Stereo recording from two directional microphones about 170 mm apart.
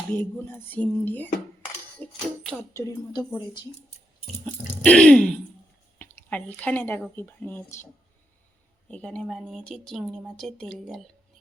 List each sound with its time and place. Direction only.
0.1 s speech: 10° left (ahead or behind)
2.7 s a woman's voice: 20° left (ahead or behind)
4.4 s a sound: 5° left (ahead or behind)
6.0 s speech: 10° left (ahead or behind)
8.9 s speech: 5° left (ahead or behind)